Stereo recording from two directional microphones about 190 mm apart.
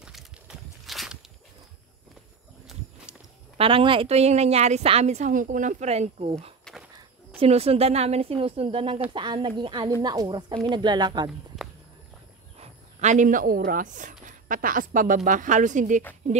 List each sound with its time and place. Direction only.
0.0 s walk: centre (ahead or behind)
3.5 s a woman's voice: 30° right (ahead or behind)
6.6 s a sound: centre (ahead or behind)
7.0 s a woman's voice: 30° right (ahead or behind)
12.5 s speech: 40° right (ahead or behind)